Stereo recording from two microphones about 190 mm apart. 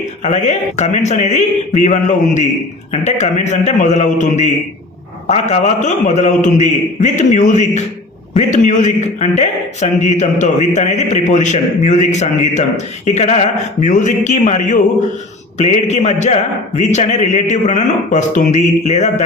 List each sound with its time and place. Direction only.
0.2 s a man's voice: 40° left (ahead or behind)